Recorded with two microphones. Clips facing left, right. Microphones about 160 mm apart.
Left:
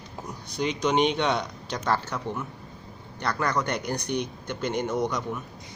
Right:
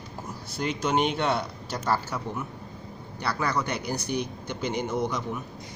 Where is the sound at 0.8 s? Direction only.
5° right (ahead or behind).